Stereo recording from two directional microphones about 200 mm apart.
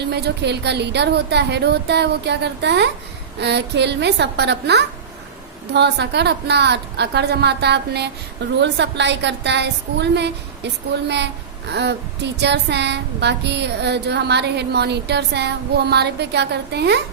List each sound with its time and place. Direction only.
0.1 s speech: 55° right (ahead or behind)